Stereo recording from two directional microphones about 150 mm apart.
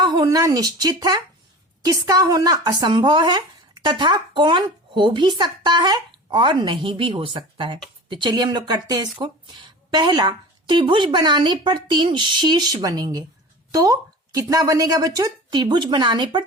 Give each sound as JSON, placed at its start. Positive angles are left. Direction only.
{"t": 0.0, "sound": "speech", "side_deg": -25}